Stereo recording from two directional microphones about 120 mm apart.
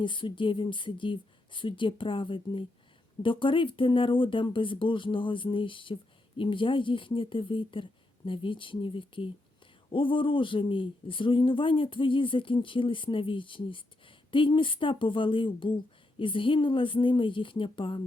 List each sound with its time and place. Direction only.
0.0 s speech: 45° left (ahead or behind)